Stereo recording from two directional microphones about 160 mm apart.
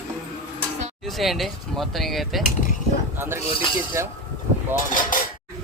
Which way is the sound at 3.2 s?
15° right (ahead or behind).